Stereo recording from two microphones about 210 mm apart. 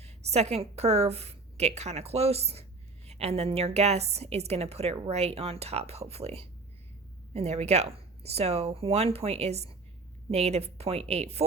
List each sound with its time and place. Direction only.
0.0 s a woman's voice: 30° right (ahead or behind)